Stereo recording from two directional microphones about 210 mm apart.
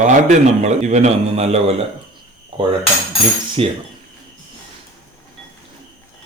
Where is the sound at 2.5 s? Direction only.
20° right (ahead or behind).